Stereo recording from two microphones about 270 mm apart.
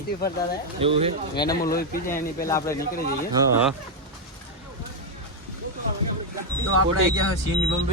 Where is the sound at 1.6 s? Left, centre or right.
Left.